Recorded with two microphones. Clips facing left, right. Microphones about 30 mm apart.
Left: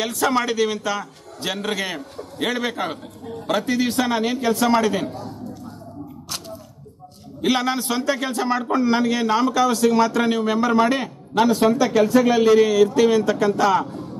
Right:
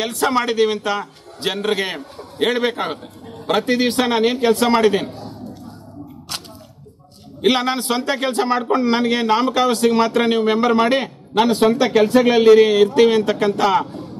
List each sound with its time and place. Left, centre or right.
0.0 s a man's voice: right
7.4 s speech: right